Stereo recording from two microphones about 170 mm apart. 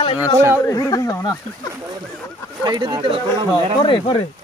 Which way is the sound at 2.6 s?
25° right (ahead or behind).